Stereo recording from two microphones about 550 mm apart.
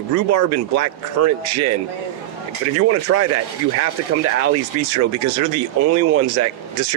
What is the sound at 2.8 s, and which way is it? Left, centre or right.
Speech, right.